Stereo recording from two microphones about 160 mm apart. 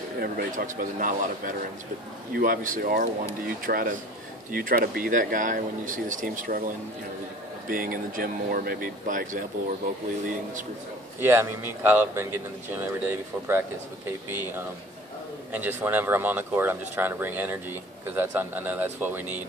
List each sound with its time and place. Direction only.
0.2 s speech: 70° right (ahead or behind)
7.7 s speech: 60° right (ahead or behind)
11.1 s speech: 15° right (ahead or behind)
15.5 s speech: 10° right (ahead or behind)